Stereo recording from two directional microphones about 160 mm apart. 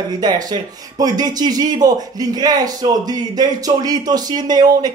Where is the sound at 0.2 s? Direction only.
25° right (ahead or behind).